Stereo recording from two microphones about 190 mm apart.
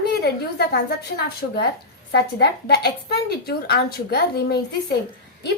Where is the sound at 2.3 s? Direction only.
60° left (ahead or behind).